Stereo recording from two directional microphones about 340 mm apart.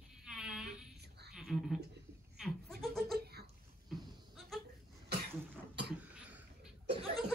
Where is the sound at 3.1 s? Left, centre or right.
Right.